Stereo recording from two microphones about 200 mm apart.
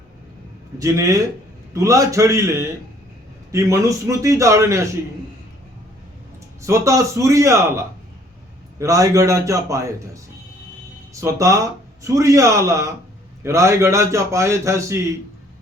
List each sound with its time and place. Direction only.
0.8 s speech: 15° right (ahead or behind)
6.6 s speech: 15° right (ahead or behind)
11.1 s speech: 15° right (ahead or behind)